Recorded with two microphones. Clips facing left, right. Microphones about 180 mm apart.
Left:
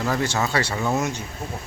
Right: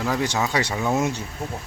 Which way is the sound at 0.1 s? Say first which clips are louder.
Even; 15° right (ahead or behind).